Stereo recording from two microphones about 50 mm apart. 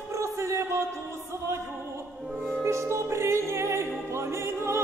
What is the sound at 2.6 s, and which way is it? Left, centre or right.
Music, right.